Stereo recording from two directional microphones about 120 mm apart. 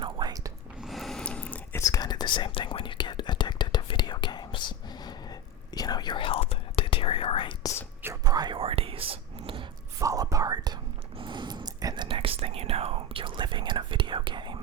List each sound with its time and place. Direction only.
0.0 s whispering: 35° right (ahead or behind)
0.8 s a sound: centre (ahead or behind)
1.8 s whispering: 30° left (ahead or behind); by 7.5 s 50° left (ahead or behind)
8.0 s whispering: 30° right (ahead or behind)
8.5 s whispering: 55° right (ahead or behind)
10.0 s whispering: 30° right (ahead or behind)
11.2 s a sound: 40° right (ahead or behind)
12.0 s whispering: 45° right (ahead or behind)